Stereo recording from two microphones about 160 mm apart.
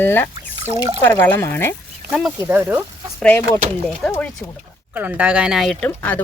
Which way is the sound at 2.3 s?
15° right (ahead or behind).